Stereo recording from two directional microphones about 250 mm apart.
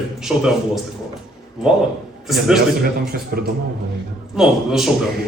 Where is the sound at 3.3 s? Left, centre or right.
Right.